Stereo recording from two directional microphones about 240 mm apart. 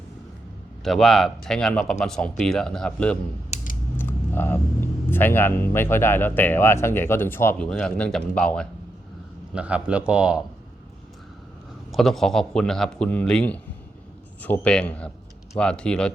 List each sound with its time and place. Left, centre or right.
0.9 s speech: centre
3.5 s a sound: left
3.9 s speech: centre
11.9 s speech: centre